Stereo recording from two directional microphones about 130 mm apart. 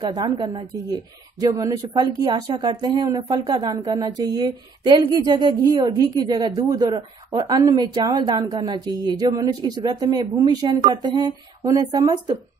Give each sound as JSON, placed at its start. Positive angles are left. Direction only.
{"t": 0.0, "sound": "speech", "side_deg": -35}